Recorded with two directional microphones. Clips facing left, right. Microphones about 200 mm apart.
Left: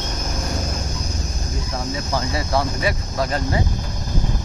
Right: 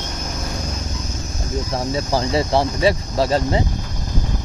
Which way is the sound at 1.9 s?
30° right (ahead or behind).